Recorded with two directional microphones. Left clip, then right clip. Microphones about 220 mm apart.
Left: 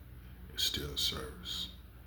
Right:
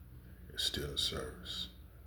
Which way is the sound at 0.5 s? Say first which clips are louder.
Left 2 dB; 10° right (ahead or behind).